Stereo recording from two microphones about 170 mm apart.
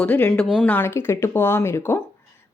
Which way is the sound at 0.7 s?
10° left (ahead or behind).